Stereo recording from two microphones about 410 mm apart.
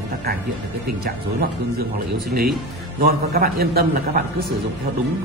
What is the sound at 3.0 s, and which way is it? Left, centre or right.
Speech, right.